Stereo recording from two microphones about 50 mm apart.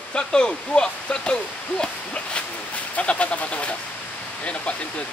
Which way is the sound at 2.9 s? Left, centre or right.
Left.